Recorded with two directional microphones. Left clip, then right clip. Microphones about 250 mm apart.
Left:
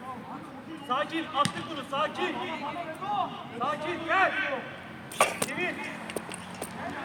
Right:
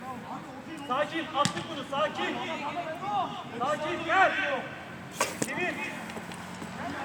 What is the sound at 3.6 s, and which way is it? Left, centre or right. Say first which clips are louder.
Speech: right 1 dB; left.